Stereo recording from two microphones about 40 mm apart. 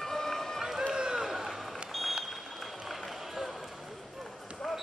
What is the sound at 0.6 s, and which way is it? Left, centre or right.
Run, centre.